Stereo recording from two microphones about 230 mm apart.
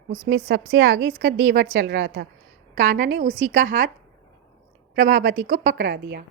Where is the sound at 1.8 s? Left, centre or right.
Right.